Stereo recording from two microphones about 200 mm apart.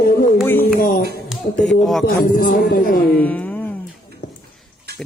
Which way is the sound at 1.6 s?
Centre (ahead or behind).